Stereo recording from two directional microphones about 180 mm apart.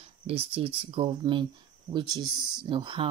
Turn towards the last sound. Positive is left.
turn(degrees=-25)  # may be behind; listen again after turning